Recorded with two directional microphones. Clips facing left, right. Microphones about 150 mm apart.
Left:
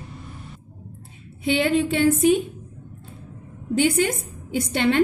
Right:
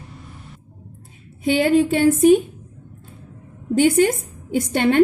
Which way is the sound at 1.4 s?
45° right (ahead or behind).